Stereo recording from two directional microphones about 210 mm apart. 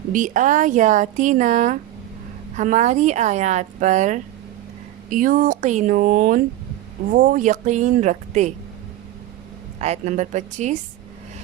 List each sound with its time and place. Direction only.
0.1 s speech: 35° right (ahead or behind)
9.7 s speech: 30° right (ahead or behind)